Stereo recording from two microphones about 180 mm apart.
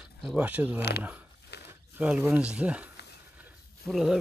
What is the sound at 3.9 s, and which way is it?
Speech, centre (ahead or behind).